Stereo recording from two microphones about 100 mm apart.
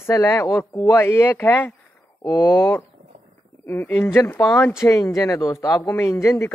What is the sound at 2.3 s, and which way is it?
Speech, 40° left (ahead or behind).